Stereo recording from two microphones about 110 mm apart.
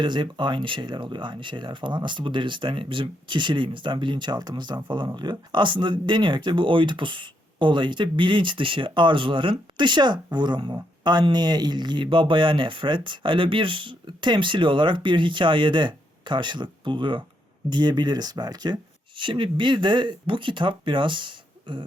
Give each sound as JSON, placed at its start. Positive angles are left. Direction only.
{"t": 0.0, "sound": "speech", "side_deg": -45}